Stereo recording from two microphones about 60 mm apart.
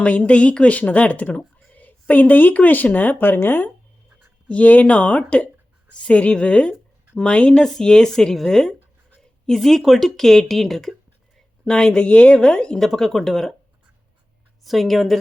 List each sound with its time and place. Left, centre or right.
0.3 s a woman's voice: centre
4.4 s a woman's voice: left; by 13.5 s centre
14.6 s a woman's voice: centre